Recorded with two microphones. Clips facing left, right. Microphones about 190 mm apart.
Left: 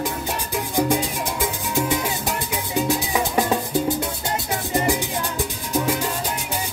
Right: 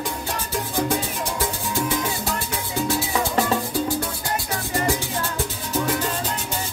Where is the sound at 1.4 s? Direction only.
15° left (ahead or behind).